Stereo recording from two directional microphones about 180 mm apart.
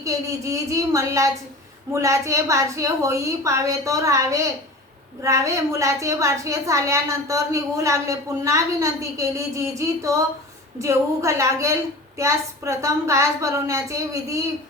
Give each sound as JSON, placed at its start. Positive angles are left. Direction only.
{"t": 0.0, "sound": "a woman's voice", "side_deg": -15}